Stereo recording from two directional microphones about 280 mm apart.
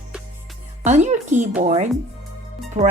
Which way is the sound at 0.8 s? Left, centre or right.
Right.